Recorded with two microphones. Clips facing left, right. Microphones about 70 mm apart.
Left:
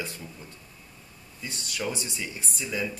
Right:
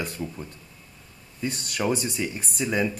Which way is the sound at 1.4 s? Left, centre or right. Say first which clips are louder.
Right 6 dB; right.